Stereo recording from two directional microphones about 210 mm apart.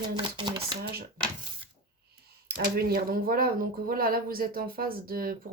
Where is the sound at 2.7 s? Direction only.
45° right (ahead or behind).